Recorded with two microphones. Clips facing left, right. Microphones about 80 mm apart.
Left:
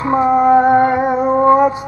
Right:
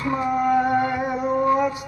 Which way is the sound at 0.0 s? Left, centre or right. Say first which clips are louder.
Left 9 dB; left.